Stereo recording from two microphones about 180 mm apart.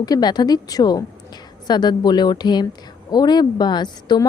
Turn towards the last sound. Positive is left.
turn(degrees=25)  # may be behind; listen again after turning